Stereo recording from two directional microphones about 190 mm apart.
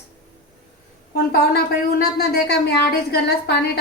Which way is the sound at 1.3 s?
55° left (ahead or behind).